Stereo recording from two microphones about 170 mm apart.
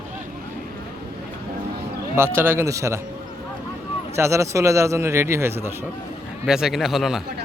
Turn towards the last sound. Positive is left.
turn(degrees=0)  # may be behind; listen again after turning